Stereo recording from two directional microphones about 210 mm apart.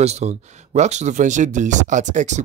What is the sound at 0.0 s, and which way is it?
Speech, 30° right (ahead or behind).